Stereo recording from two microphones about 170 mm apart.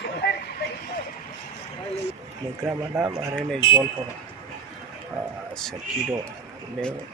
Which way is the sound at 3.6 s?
30° left (ahead or behind).